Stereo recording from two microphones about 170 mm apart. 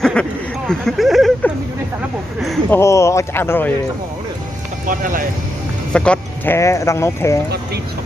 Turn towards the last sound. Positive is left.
turn(degrees=15)  # may be behind; listen again after turning